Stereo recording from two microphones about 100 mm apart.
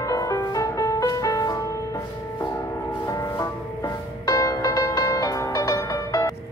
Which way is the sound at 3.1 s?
30° left (ahead or behind).